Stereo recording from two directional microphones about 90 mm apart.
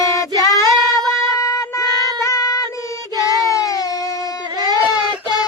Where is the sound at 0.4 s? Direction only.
40° left (ahead or behind).